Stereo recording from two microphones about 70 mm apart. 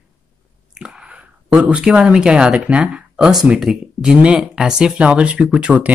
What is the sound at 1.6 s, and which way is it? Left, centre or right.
Speech, centre.